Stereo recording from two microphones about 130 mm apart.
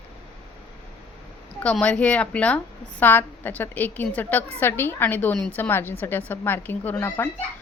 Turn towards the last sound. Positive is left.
turn(degrees=20)  # may be behind; listen again after turning